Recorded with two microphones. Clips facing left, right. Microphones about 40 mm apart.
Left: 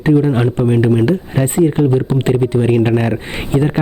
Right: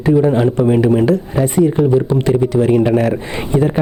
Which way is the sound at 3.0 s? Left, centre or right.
Left.